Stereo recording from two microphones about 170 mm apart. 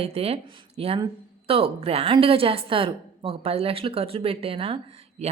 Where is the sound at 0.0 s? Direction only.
35° right (ahead or behind).